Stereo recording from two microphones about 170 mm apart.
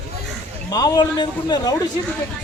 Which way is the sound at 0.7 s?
20° left (ahead or behind).